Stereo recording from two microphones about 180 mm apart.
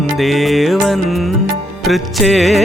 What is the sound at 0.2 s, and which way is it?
Music, centre (ahead or behind).